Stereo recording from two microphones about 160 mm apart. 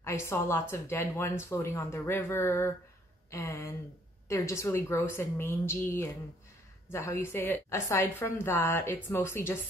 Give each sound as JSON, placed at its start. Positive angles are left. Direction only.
{"t": 0.0, "sound": "a woman's voice", "side_deg": 15}
{"t": 6.9, "sound": "a woman's voice", "side_deg": 15}